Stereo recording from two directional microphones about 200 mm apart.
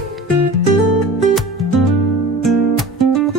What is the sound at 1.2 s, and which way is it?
Music, centre (ahead or behind).